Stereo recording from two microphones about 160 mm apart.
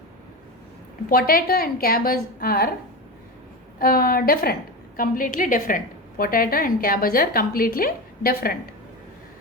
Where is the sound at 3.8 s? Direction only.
65° left (ahead or behind).